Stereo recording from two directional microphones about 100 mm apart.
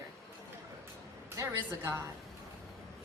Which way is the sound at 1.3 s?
30° right (ahead or behind).